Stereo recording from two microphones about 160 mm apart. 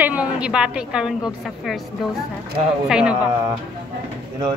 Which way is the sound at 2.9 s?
5° right (ahead or behind).